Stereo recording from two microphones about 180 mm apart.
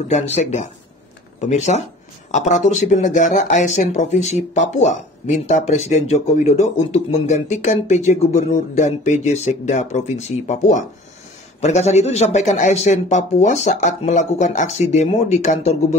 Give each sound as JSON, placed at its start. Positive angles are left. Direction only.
{"t": 0.1, "sound": "speech", "side_deg": 40}